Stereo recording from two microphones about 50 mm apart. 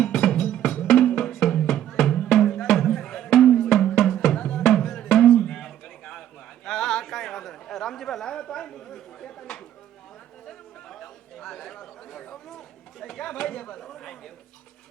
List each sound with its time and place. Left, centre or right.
0.0 s music: centre
4.4 s music: centre
4.6 s music: centre
5.4 s a sound: centre
10.8 s chatter: centre